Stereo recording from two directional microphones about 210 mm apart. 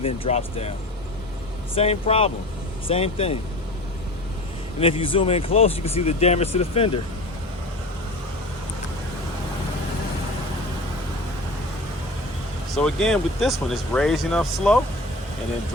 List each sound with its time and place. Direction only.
0.0 s speech: 30° left (ahead or behind)
1.7 s speech: 30° left (ahead or behind)
4.8 s speech: 25° left (ahead or behind)
12.7 s speech: centre (ahead or behind)